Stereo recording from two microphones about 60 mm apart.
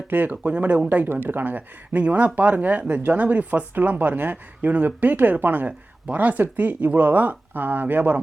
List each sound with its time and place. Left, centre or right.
0.1 s speech: right